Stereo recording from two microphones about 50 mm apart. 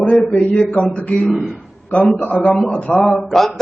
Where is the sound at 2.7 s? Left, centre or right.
Left.